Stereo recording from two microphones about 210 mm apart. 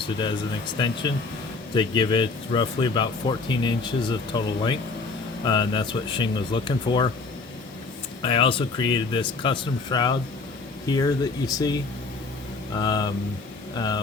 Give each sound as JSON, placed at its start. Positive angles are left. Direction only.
{"t": 0.8, "sound": "speech", "side_deg": 20}
{"t": 8.2, "sound": "speech", "side_deg": 25}